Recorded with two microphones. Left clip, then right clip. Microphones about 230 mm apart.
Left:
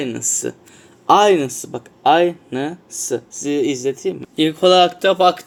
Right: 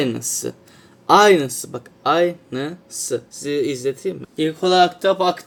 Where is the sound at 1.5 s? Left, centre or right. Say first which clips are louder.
Left 2 dB; right.